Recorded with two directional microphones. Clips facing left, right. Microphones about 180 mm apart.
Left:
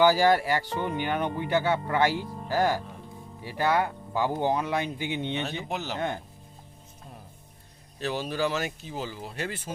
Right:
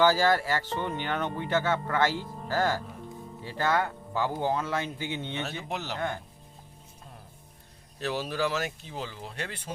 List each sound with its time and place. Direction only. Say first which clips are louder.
0.0 s speech: left 2 dB; 15° left (ahead or behind)
5.6 s speech: left 2 dB; centre (ahead or behind)
7.9 s speech: left 1 dB; centre (ahead or behind)